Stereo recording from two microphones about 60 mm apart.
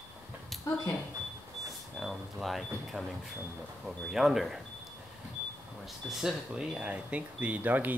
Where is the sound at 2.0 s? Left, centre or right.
Centre.